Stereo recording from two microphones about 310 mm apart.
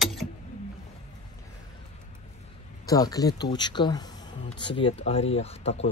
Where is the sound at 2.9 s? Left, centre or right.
Centre.